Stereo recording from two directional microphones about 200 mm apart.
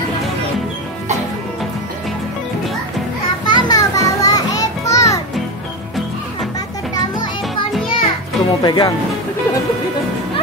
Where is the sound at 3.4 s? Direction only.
20° left (ahead or behind).